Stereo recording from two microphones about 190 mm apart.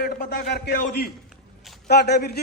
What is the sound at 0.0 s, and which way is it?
A man's voice, 60° left (ahead or behind).